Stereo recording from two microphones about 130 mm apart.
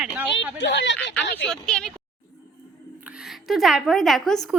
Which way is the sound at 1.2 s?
5° left (ahead or behind).